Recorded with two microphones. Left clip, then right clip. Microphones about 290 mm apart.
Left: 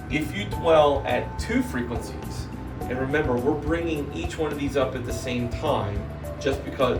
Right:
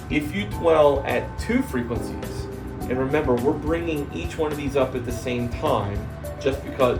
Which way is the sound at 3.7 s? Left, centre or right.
Right.